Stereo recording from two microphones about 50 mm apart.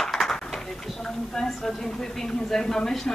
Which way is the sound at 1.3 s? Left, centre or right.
Centre.